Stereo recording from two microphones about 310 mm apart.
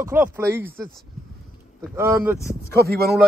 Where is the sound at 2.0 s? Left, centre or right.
Centre.